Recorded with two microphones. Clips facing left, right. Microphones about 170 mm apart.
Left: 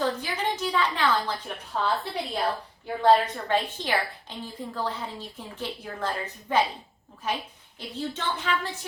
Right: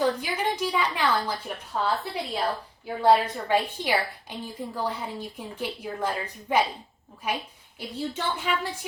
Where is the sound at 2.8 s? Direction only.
5° right (ahead or behind).